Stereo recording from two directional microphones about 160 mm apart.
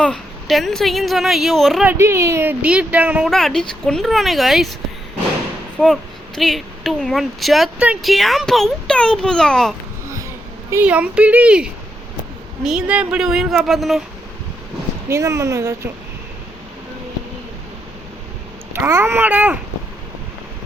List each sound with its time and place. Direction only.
0.0 s speech: centre (ahead or behind)
1.9 s speech: 15° right (ahead or behind)
3.2 s speech: 5° left (ahead or behind)
5.8 s speech: centre (ahead or behind)
10.7 s speech: 10° right (ahead or behind)
15.1 s speech: 20° right (ahead or behind)
18.7 s speech: 15° right (ahead or behind)